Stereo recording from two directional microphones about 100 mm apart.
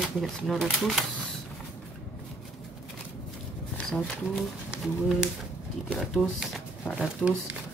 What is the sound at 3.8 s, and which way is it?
Speech, centre (ahead or behind).